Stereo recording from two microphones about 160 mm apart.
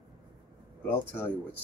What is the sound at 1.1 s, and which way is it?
Speech, 15° left (ahead or behind).